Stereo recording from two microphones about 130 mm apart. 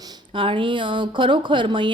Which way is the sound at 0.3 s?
40° right (ahead or behind).